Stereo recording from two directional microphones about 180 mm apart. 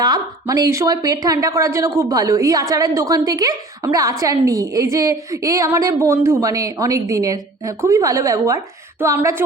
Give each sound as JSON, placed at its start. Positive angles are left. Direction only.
{"t": 0.0, "sound": "a woman's voice", "side_deg": -20}